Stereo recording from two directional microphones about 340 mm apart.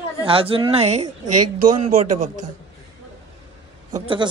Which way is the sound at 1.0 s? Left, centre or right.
Right.